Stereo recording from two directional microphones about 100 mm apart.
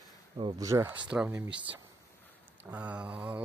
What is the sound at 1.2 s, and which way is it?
Speech, 25° right (ahead or behind).